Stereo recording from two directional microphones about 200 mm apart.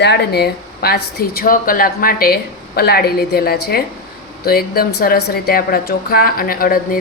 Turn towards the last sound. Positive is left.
turn(degrees=45)  # may be behind; listen again after turning